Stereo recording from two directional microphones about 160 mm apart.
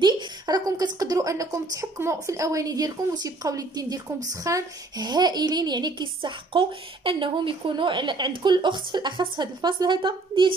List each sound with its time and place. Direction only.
0.0 s a child's voice: 25° right (ahead or behind)